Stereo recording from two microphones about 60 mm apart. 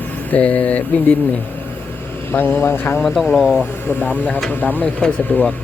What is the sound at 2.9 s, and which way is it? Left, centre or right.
Speech, centre.